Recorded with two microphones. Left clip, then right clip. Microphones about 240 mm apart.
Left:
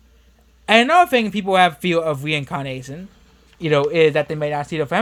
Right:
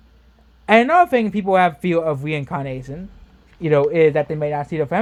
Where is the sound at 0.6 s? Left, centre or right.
Centre.